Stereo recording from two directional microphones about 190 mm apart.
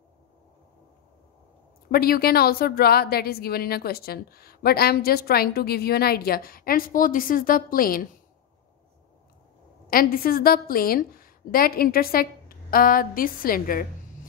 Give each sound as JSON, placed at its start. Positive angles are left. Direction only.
{"t": 1.9, "sound": "speech", "side_deg": 50}
{"t": 9.8, "sound": "speech", "side_deg": 50}